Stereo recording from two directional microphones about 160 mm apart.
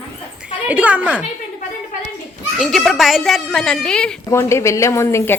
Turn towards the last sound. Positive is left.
turn(degrees=15)  # may be behind; listen again after turning